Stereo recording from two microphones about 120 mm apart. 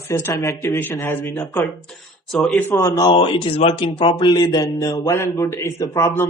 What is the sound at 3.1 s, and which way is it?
A man's voice, 50° left (ahead or behind).